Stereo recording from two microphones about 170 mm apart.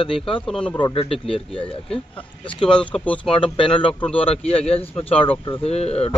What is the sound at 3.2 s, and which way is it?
Speech, 30° left (ahead or behind).